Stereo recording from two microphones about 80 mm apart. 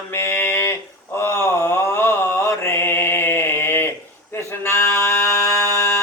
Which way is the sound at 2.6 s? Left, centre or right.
Left.